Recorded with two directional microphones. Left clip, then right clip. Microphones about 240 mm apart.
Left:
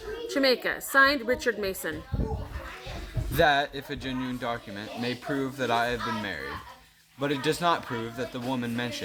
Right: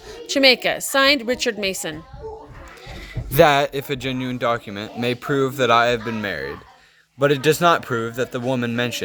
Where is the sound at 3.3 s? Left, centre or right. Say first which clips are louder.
Right 8 dB; right.